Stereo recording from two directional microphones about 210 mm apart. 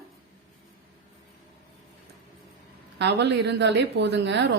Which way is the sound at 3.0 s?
55° right (ahead or behind).